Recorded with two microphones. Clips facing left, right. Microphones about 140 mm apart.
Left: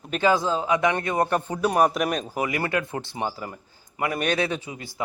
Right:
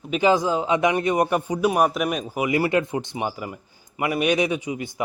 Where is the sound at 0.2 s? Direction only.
15° right (ahead or behind).